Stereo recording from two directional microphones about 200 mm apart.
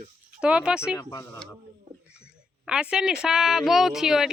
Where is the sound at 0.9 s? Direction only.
15° left (ahead or behind).